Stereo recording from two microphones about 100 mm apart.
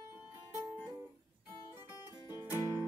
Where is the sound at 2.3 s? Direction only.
25° right (ahead or behind).